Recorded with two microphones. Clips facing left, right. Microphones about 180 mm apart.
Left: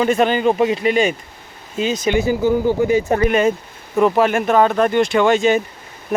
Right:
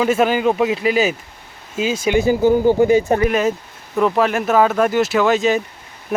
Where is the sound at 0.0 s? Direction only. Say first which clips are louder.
Even; 5° right (ahead or behind).